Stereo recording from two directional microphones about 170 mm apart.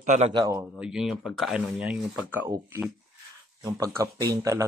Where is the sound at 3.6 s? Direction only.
20° right (ahead or behind).